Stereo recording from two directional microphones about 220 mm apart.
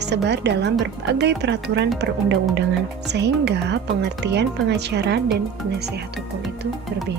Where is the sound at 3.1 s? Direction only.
50° right (ahead or behind).